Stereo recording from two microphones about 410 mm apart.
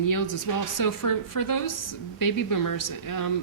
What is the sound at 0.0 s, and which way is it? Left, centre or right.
A woman's voice, left.